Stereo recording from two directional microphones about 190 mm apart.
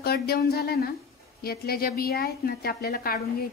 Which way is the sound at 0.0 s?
55° left (ahead or behind).